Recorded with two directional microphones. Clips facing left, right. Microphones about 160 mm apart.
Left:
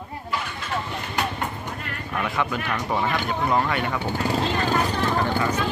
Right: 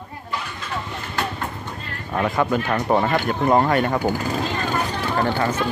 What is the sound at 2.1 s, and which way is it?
Speech, 45° right (ahead or behind).